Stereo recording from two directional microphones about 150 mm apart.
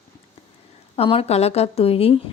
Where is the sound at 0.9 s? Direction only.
40° left (ahead or behind).